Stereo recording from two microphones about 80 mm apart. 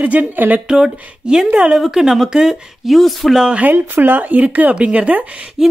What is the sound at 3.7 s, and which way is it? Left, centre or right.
Speech, right.